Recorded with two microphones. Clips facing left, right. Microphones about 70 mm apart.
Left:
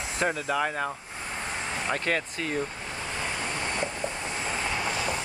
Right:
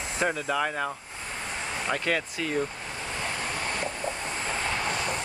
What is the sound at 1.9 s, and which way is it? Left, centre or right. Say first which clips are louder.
Speech: even; left.